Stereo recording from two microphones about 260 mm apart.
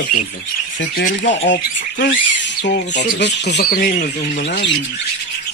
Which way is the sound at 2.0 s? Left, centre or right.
Left.